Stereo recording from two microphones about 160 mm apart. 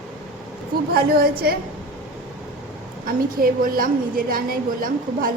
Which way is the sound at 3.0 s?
65° right (ahead or behind).